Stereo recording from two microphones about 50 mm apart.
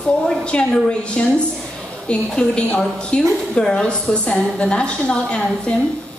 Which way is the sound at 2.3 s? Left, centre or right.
Centre.